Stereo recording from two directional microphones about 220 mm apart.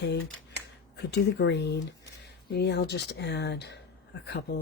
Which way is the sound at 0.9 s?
50° left (ahead or behind).